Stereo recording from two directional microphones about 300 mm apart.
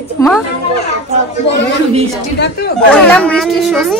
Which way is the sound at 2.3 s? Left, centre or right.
Left.